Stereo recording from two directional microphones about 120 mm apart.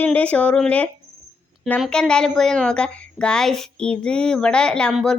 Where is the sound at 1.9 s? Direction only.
5° left (ahead or behind).